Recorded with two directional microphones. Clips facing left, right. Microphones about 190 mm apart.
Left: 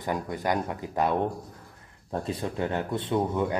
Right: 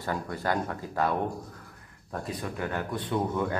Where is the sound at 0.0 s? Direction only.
15° left (ahead or behind).